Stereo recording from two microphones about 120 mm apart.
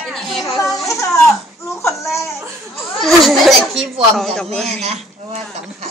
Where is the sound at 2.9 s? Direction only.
Centre (ahead or behind).